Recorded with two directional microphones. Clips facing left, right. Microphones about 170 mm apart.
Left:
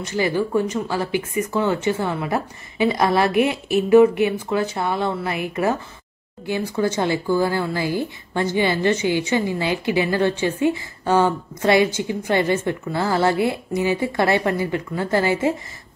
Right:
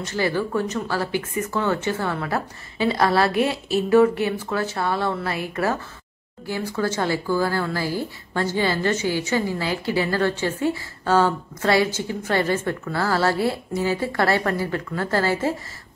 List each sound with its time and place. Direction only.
0.0 s speech: 15° left (ahead or behind)